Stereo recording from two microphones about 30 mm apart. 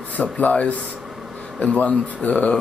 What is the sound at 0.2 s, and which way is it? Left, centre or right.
Speech, left.